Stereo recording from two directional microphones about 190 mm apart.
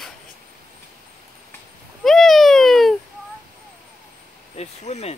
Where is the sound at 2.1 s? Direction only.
Centre (ahead or behind).